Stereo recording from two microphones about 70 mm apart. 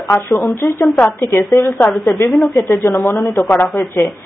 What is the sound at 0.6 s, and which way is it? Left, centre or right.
Speech, left.